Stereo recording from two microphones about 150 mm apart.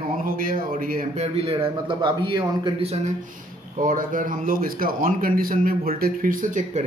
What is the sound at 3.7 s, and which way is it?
A man's voice, 65° right (ahead or behind).